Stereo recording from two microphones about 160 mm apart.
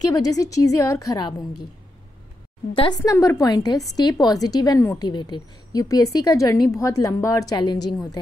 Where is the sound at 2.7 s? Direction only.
25° left (ahead or behind).